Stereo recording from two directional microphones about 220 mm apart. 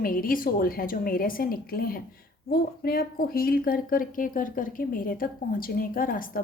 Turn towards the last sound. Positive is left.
turn(degrees=40)  # may be behind; listen again after turning